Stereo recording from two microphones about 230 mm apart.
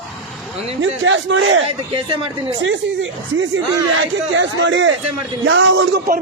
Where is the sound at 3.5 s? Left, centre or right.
Right.